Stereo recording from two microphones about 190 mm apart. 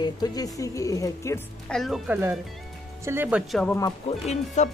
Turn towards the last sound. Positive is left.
turn(degrees=35)  # may be behind; listen again after turning